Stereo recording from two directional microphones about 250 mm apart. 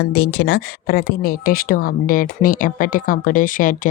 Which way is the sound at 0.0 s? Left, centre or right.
Left.